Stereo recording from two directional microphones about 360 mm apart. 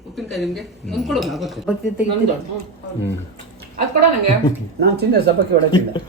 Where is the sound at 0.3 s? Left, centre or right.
Centre.